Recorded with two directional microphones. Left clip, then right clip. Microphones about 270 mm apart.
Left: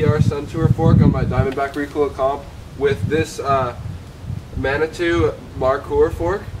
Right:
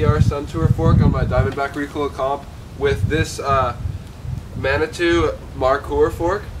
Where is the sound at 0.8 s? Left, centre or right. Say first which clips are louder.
Left 2 dB; centre.